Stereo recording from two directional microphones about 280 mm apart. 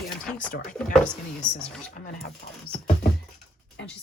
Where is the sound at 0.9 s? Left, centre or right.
Centre.